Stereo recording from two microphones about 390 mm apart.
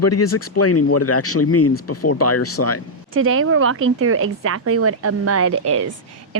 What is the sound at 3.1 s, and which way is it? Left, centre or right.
Speech, right.